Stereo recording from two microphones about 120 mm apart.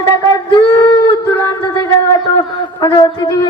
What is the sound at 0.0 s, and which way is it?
Singing, 35° left (ahead or behind).